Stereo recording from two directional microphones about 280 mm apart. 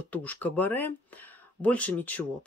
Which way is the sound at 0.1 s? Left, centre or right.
Centre.